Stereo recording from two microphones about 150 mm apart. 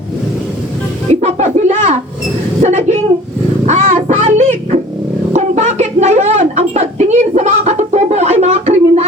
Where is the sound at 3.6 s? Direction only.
55° right (ahead or behind).